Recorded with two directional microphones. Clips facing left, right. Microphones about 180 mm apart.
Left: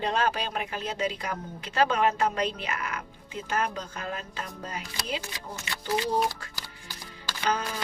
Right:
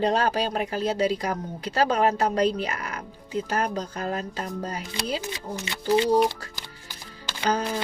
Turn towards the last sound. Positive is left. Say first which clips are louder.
# right 4 dB
turn(degrees=-30)  # may be behind; listen again after turning